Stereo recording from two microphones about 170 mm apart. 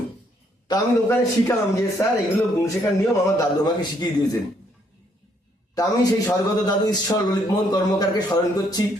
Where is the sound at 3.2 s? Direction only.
20° left (ahead or behind).